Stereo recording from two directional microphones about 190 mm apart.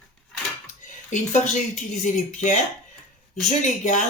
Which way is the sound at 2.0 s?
40° left (ahead or behind).